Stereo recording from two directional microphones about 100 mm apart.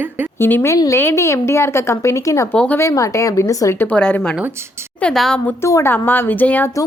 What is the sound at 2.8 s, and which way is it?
Speech, 30° left (ahead or behind).